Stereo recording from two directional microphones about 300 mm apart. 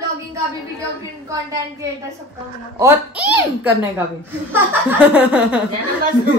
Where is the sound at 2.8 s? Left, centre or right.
Centre.